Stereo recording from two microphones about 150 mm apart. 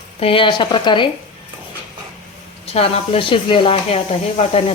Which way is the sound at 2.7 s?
40° left (ahead or behind).